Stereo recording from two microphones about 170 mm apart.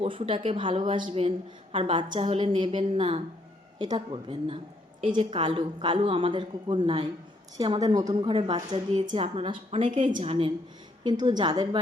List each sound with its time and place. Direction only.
0.0 s a woman's voice: 30° right (ahead or behind)